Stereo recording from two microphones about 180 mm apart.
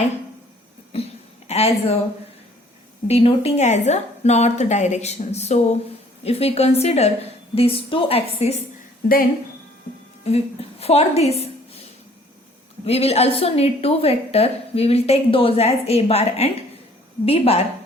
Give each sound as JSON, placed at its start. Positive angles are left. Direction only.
{"t": 0.9, "sound": "a sound", "side_deg": 35}
{"t": 3.1, "sound": "a woman's voice", "side_deg": 35}
{"t": 10.2, "sound": "a woman's voice", "side_deg": 35}
{"t": 12.8, "sound": "a woman's voice", "side_deg": 35}